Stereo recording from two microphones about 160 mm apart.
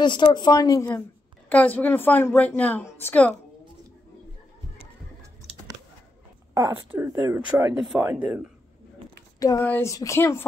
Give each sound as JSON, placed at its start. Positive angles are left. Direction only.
{"t": 0.0, "sound": "a woman's voice", "side_deg": 30}
{"t": 6.5, "sound": "speech", "side_deg": -15}
{"t": 7.7, "sound": "speech", "side_deg": -5}
{"t": 9.4, "sound": "a woman's voice", "side_deg": 20}